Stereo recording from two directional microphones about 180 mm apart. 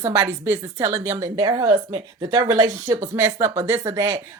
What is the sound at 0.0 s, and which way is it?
A woman's voice, 15° right (ahead or behind).